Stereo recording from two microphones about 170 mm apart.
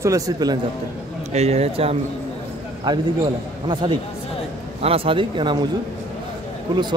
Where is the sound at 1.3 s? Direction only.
40° right (ahead or behind).